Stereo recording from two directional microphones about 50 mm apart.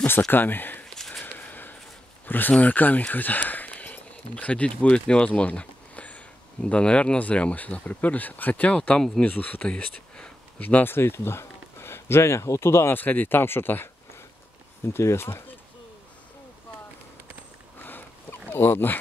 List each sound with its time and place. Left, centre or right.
0.3 s speech: left
0.9 s a sound: centre
1.2 s a sound: left
2.2 s speech: left
8.6 s speech: left
9.2 s speech: left
10.6 s speech: left
12.9 s speech: left
14.9 s speech: left
18.5 s speech: left